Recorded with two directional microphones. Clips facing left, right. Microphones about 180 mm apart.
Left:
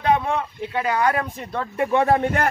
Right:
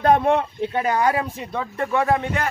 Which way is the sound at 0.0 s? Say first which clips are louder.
Right 4 dB; 50° right (ahead or behind).